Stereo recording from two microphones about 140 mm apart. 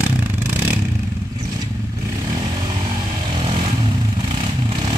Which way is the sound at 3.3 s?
35° right (ahead or behind).